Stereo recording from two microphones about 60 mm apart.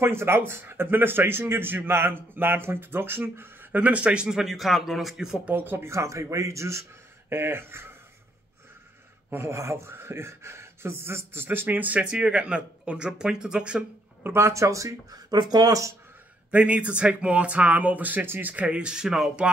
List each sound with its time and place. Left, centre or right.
0.0 s speech: right; by 5.4 s centre
5.5 s speech: right
5.9 s speech: right
7.2 s speech: right
9.3 s speech: right
9.6 s speech: right; by 13.8 s centre
14.2 s speech: right
16.4 s speech: right
18.5 s speech: right